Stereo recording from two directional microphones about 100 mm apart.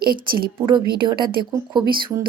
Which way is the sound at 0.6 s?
50° right (ahead or behind).